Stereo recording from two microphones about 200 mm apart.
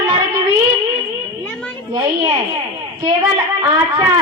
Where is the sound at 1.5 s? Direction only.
5° left (ahead or behind).